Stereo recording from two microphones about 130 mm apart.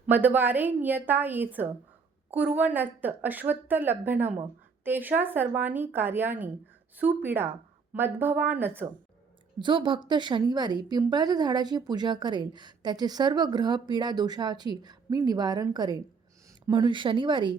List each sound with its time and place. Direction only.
0.1 s a woman's voice: 15° right (ahead or behind)
9.6 s a woman's voice: 35° right (ahead or behind)